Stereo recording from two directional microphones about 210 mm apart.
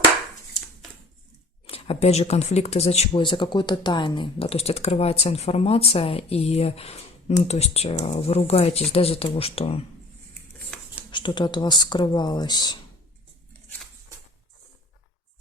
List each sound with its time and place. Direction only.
1.6 s speech: 30° left (ahead or behind)
11.1 s speech: 20° left (ahead or behind)